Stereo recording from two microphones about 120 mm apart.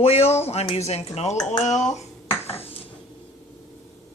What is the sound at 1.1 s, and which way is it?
Speech, 75° left (ahead or behind).